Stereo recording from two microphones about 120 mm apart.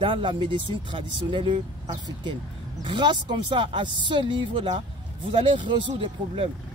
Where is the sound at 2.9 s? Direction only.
40° right (ahead or behind).